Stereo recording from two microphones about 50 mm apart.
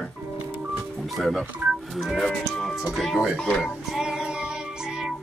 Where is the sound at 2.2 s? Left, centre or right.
Centre.